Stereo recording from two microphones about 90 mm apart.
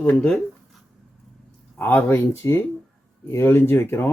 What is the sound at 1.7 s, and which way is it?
Speech, 20° left (ahead or behind).